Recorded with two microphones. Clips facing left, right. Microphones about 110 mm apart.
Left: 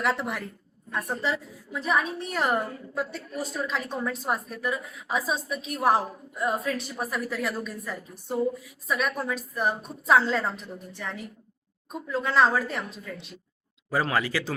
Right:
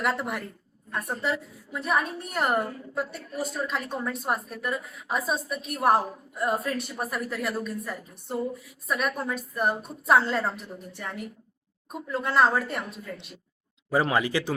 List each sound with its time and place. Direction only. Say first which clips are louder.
0.0 s a woman's voice: left 1 dB; centre (ahead or behind)
13.9 s speech: right 2 dB; 20° right (ahead or behind)